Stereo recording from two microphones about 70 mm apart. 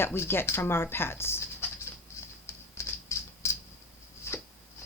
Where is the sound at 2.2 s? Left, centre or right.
Left.